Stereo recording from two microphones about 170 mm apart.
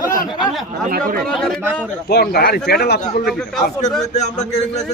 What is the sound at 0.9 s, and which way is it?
Speech, 55° right (ahead or behind).